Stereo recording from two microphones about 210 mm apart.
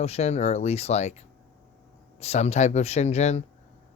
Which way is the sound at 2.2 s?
30° left (ahead or behind).